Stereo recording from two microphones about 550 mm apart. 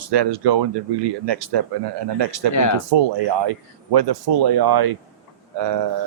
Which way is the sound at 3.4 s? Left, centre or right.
Right.